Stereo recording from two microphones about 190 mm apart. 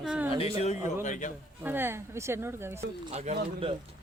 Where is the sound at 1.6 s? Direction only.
10° right (ahead or behind).